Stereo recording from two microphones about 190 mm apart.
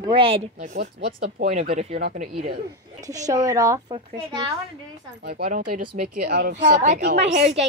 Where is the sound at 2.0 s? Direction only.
55° right (ahead or behind).